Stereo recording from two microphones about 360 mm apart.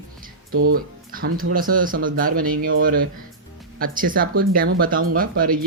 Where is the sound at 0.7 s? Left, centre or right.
Right.